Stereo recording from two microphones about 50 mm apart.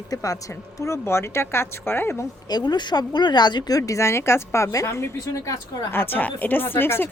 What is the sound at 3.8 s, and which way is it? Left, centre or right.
A woman's voice, left.